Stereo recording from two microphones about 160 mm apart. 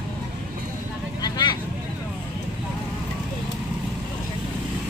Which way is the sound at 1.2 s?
25° left (ahead or behind).